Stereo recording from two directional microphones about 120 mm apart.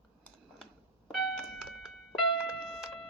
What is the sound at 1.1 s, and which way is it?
Keyboard, centre (ahead or behind).